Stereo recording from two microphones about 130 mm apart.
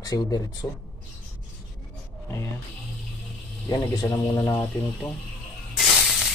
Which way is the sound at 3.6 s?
25° left (ahead or behind).